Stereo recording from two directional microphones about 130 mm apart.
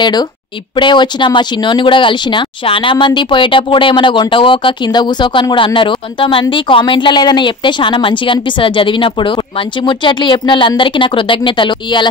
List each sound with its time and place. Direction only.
0.0 s speech: 35° left (ahead or behind)